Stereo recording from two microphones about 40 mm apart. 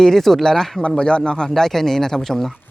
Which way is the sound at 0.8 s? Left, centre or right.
Left.